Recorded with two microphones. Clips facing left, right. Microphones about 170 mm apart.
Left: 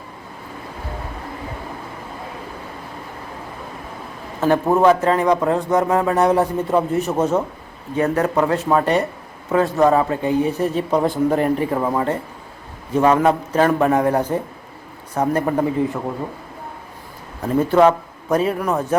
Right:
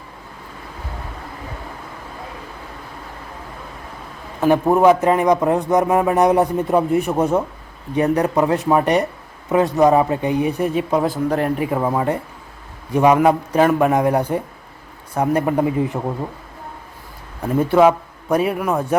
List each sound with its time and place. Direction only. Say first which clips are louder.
4.4 s a man's voice: right 1 dB; 15° right (ahead or behind)
17.4 s a man's voice: even; 10° right (ahead or behind)